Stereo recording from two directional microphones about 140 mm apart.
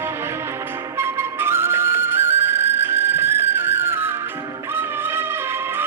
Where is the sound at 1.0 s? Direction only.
15° right (ahead or behind).